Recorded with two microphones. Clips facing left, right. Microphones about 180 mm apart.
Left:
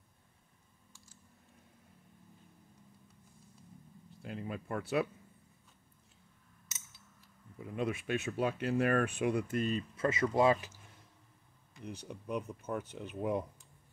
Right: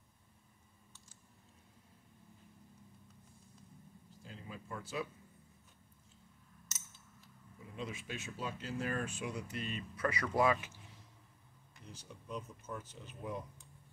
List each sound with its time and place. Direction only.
4.2 s a sound: 65° left (ahead or behind)
7.6 s speech: 60° left (ahead or behind); by 9.8 s 40° left (ahead or behind)
9.9 s speech: 25° left (ahead or behind)
11.8 s speech: 60° left (ahead or behind)